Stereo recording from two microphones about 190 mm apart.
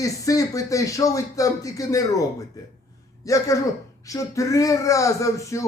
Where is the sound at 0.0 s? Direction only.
15° left (ahead or behind).